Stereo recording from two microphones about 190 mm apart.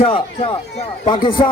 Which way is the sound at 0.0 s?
25° left (ahead or behind).